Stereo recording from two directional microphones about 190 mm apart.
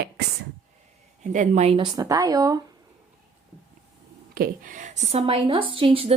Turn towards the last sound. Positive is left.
turn(degrees=-30)  # may be behind; listen again after turning